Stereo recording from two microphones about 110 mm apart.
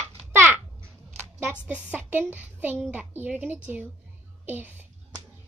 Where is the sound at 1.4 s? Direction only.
15° right (ahead or behind).